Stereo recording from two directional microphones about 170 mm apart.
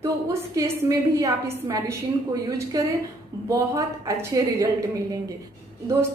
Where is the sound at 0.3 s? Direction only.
20° right (ahead or behind).